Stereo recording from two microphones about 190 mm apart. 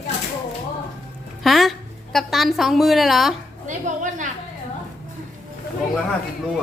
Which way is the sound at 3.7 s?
40° right (ahead or behind).